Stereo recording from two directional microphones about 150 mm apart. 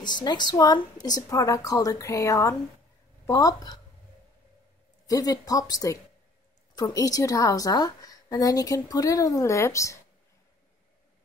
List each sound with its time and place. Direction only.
0.0 s a woman's voice: 30° left (ahead or behind)
5.0 s a woman's voice: 25° left (ahead or behind)